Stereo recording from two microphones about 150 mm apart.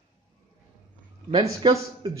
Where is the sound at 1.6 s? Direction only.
30° right (ahead or behind).